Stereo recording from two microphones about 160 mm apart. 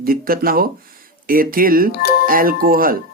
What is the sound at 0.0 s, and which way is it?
Speech, 65° right (ahead or behind).